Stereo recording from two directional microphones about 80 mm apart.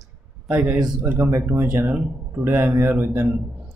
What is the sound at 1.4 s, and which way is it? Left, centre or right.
Speech, right.